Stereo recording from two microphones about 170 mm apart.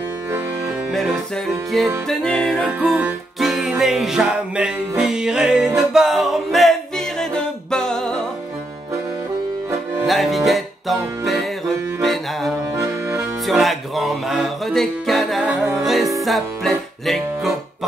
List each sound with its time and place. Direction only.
0.3 s music: 10° right (ahead or behind)
0.9 s music: centre (ahead or behind)
10.0 s music: centre (ahead or behind)
12.6 s accordion: 15° right (ahead or behind)
13.5 s music: centre (ahead or behind)